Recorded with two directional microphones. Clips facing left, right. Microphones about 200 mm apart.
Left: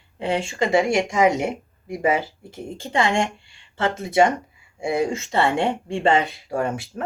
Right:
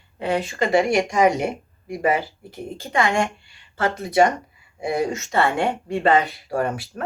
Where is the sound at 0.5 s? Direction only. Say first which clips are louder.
Even; 15° left (ahead or behind).